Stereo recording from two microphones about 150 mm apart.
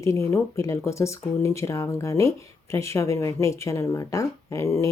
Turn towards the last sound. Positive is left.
turn(degrees=20)  # may be behind; listen again after turning